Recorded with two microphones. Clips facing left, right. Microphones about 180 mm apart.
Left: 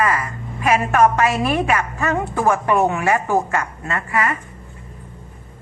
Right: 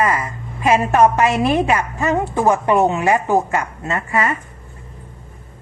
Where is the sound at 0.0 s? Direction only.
25° right (ahead or behind).